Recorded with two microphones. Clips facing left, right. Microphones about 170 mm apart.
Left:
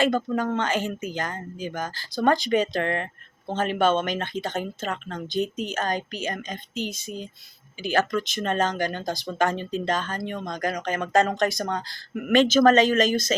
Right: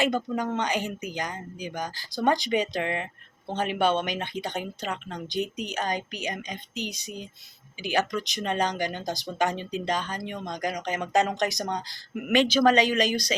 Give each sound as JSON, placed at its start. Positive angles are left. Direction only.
{"t": 0.0, "sound": "speech", "side_deg": -15}